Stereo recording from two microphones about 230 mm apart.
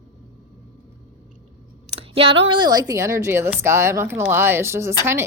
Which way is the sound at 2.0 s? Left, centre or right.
Right.